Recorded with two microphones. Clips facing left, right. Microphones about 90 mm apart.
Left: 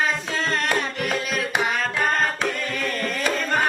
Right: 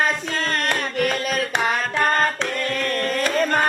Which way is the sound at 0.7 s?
5° left (ahead or behind).